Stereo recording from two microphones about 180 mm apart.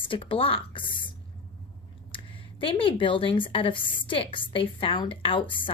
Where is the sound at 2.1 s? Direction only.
30° left (ahead or behind).